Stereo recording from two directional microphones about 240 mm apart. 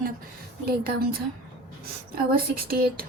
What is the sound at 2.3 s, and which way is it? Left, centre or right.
Speech, right.